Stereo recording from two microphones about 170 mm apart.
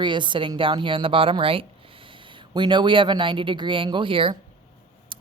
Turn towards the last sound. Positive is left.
turn(degrees=-30)  # may be behind; listen again after turning